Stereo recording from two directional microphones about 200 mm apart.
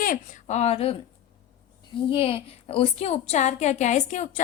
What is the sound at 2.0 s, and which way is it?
A woman's voice, 25° left (ahead or behind).